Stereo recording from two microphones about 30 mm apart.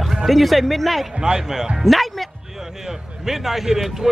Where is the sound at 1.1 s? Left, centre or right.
Right.